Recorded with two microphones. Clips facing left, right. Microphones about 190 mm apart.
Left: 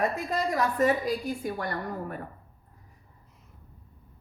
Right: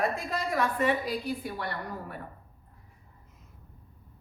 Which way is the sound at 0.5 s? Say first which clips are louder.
Left 2 dB; 40° left (ahead or behind).